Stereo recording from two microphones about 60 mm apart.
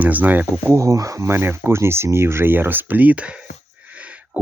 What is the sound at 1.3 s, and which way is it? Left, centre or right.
Speech, right.